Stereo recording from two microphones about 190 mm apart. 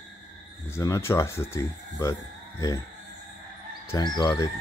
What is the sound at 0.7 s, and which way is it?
Speech, 15° left (ahead or behind).